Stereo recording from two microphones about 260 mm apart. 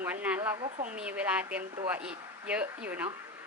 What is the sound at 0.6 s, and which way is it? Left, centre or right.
Speech, right.